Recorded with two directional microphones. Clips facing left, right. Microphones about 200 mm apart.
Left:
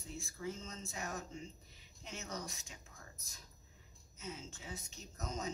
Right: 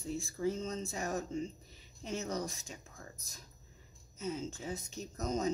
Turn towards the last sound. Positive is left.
turn(degrees=-40)  # may be behind; listen again after turning